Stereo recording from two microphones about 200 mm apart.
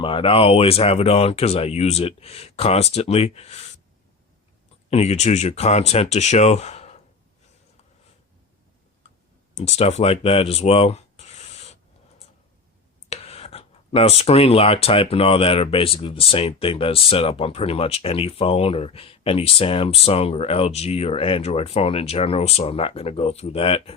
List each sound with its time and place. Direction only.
0.0 s speech: 25° left (ahead or behind)
4.9 s speech: 35° left (ahead or behind)
9.6 s speech: 30° left (ahead or behind)
13.1 s speech: 30° left (ahead or behind)